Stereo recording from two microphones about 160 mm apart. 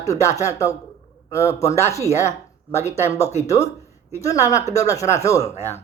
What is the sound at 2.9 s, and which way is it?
Speech, 45° left (ahead or behind).